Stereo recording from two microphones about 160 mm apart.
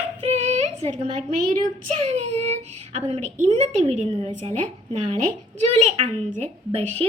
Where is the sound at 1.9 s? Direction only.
45° right (ahead or behind).